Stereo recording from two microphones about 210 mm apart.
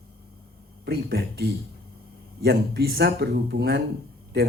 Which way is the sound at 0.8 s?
50° right (ahead or behind).